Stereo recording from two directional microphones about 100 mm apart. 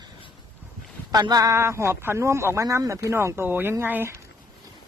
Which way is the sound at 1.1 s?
40° right (ahead or behind).